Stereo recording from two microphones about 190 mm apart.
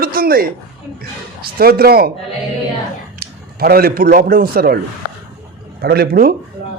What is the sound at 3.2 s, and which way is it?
A man's voice, 55° right (ahead or behind).